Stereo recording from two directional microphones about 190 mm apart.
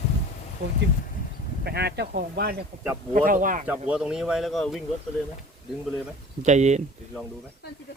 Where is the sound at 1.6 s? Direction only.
60° right (ahead or behind); by 3.7 s 45° right (ahead or behind).